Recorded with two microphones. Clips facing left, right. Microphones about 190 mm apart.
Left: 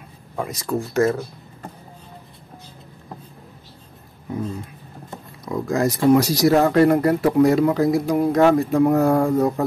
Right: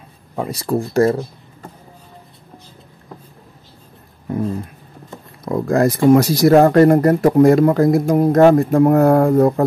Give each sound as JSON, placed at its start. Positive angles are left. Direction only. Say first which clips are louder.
{"t": 0.4, "sound": "speech", "louder": "right 4 dB", "side_deg": -30}
{"t": 5.4, "sound": "speech", "louder": "right 5 dB", "side_deg": -55}